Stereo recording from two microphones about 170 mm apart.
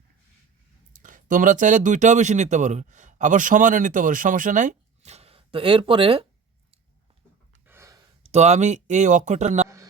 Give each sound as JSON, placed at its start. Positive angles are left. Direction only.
{"t": 1.0, "sound": "speech", "side_deg": -50}
{"t": 7.7, "sound": "gasp", "side_deg": -15}
{"t": 8.2, "sound": "speech", "side_deg": -40}